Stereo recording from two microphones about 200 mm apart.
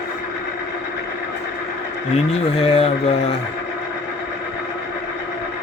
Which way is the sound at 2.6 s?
30° left (ahead or behind).